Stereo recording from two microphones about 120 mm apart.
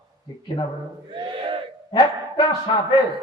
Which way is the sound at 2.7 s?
40° left (ahead or behind).